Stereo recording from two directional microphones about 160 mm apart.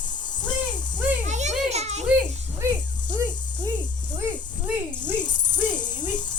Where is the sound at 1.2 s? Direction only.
45° right (ahead or behind).